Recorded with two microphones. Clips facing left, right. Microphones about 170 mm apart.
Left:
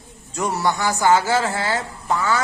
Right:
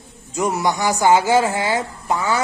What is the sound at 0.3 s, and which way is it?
A woman's voice, 10° right (ahead or behind).